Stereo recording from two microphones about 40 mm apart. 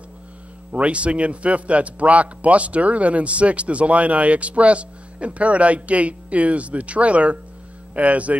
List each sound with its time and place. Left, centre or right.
0.7 s a man's voice: right